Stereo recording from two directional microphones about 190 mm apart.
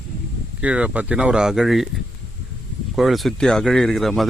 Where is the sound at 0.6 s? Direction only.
5° right (ahead or behind).